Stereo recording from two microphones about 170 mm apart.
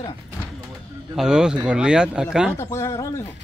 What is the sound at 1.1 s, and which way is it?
Speech, 5° right (ahead or behind).